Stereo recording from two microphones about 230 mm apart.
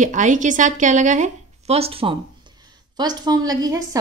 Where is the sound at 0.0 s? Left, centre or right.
Right.